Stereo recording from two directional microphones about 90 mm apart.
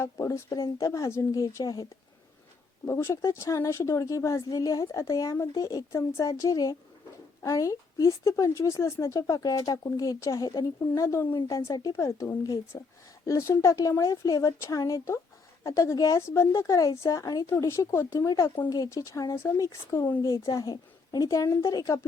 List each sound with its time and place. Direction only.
0.0 s a woman's voice: 30° left (ahead or behind)
2.8 s a woman's voice: 30° left (ahead or behind)